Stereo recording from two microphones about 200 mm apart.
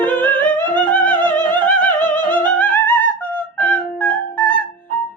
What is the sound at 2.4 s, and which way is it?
Music, 10° left (ahead or behind).